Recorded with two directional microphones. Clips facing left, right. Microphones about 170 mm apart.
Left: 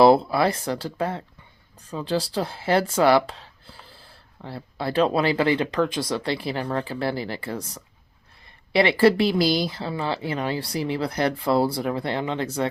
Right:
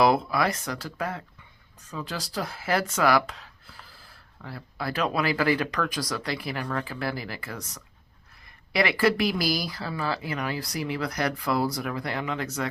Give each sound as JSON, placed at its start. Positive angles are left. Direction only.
{"t": 0.0, "sound": "speech", "side_deg": 30}